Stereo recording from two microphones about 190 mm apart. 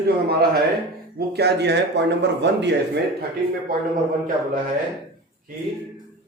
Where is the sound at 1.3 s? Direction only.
60° right (ahead or behind).